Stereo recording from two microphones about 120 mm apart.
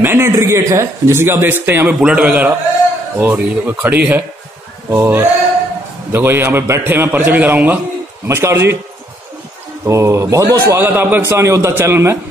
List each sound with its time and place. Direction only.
0.0 s a man's voice: 20° right (ahead or behind)
2.0 s a man's voice: 5° right (ahead or behind)
9.8 s a man's voice: 25° right (ahead or behind)